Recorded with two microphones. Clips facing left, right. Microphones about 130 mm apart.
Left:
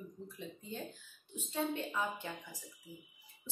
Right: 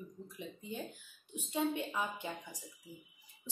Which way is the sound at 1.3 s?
15° right (ahead or behind).